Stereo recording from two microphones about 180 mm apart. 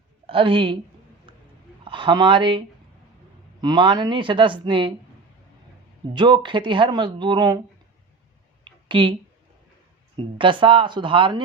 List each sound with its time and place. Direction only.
0.3 s speech: 30° right (ahead or behind)
1.8 s speech: 25° right (ahead or behind)
6.1 s speech: 25° right (ahead or behind)
8.6 s a sound: 25° right (ahead or behind)
10.2 s speech: 30° right (ahead or behind)